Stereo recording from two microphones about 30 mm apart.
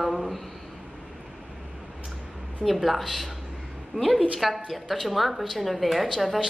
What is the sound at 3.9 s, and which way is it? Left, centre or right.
Speech, right.